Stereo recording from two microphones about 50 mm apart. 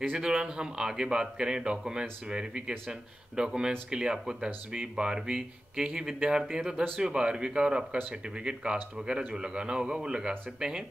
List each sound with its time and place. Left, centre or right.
0.1 s speech: centre